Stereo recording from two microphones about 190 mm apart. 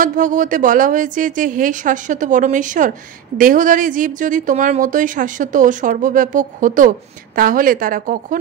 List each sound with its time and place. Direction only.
0.0 s speech: 45° right (ahead or behind)